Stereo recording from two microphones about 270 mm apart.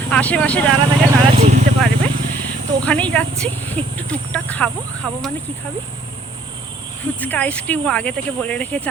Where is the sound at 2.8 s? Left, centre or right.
Centre.